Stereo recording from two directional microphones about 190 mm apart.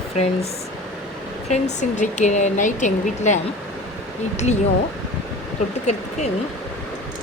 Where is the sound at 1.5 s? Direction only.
40° left (ahead or behind).